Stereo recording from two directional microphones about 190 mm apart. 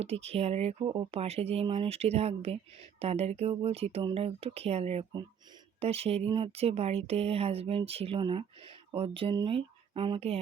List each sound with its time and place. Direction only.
0.0 s speech: 35° right (ahead or behind)